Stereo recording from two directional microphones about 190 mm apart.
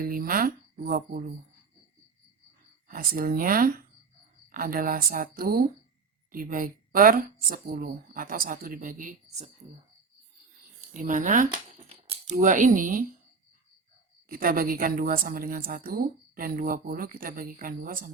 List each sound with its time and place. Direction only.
0.0 s a woman's voice: 50° right (ahead or behind)
2.8 s a woman's voice: 50° right (ahead or behind)
10.9 s a woman's voice: 40° right (ahead or behind)
14.3 s a woman's voice: 50° right (ahead or behind)